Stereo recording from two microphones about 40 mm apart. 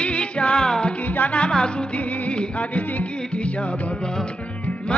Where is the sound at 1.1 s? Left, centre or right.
Left.